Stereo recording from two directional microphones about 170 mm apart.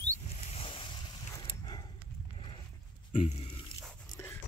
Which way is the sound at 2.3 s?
30° left (ahead or behind).